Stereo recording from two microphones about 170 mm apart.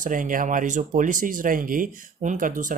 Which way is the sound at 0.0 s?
50° right (ahead or behind).